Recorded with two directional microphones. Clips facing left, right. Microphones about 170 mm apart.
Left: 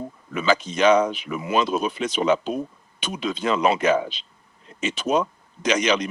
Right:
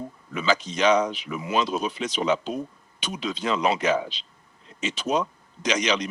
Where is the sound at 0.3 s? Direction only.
55° left (ahead or behind).